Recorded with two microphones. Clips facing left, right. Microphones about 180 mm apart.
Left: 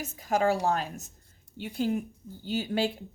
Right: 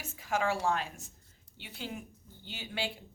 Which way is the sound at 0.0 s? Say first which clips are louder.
Left 6 dB; 40° left (ahead or behind).